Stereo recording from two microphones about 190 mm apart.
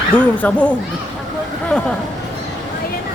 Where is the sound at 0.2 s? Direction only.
5° left (ahead or behind).